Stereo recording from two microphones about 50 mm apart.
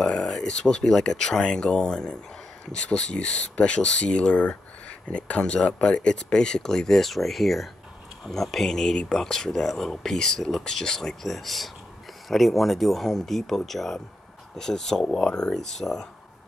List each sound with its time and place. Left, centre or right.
0.0 s speech: centre
11.2 s speech: centre